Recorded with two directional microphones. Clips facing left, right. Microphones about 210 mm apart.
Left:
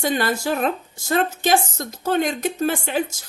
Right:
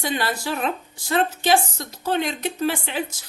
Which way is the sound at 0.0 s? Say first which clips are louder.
Left 4 dB; 45° left (ahead or behind).